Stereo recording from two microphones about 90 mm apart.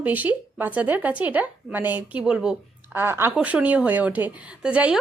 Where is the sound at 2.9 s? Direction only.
25° right (ahead or behind).